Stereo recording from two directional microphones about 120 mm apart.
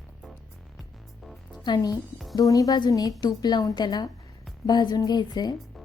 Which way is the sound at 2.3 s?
30° left (ahead or behind).